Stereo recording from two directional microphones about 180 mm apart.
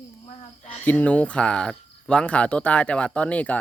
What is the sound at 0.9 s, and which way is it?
Speech, 10° left (ahead or behind).